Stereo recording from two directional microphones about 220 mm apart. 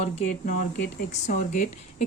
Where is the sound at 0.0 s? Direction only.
35° left (ahead or behind).